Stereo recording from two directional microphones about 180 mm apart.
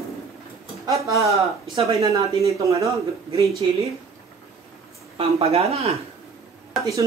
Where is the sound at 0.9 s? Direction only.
15° right (ahead or behind).